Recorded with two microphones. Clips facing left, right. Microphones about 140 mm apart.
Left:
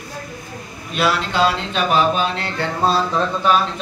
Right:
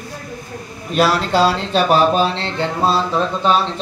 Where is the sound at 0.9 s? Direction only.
40° right (ahead or behind).